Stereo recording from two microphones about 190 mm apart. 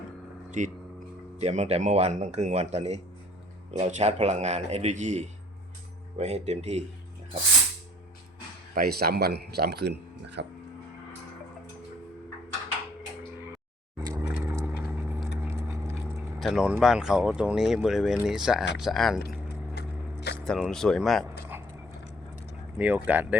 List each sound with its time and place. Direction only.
0.6 s a man's voice: 40° right (ahead or behind)
8.7 s speech: 55° right (ahead or behind)
14.0 s vehicle: 15° right (ahead or behind)
15.4 s a sound: 15° right (ahead or behind)
16.4 s speech: centre (ahead or behind)
19.7 s biting: 60° left (ahead or behind)
20.3 s speech: 5° left (ahead or behind)
22.8 s speech: 10° right (ahead or behind)